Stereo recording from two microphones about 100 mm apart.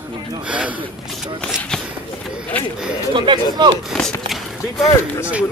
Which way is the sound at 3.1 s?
55° right (ahead or behind).